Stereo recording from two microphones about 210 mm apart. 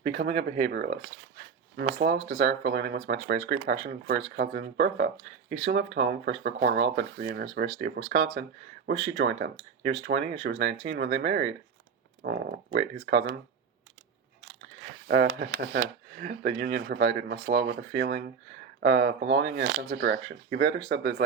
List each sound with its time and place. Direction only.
0.1 s speech: 55° right (ahead or behind)
2.0 s speech: 50° right (ahead or behind)
15.0 s speech: 55° right (ahead or behind); by 20.0 s 75° right (ahead or behind)
20.0 s speech: 50° right (ahead or behind)